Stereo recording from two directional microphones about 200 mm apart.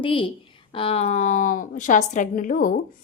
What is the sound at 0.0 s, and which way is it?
A woman's voice, 25° left (ahead or behind).